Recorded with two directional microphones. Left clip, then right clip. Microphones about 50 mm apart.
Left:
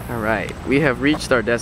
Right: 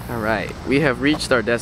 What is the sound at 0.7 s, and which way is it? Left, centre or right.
Speech, centre.